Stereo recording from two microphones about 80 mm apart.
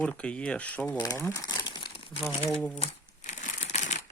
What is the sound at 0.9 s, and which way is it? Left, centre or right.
Speech, left.